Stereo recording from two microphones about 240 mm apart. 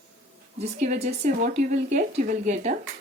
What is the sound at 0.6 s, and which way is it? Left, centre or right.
A woman's voice, right.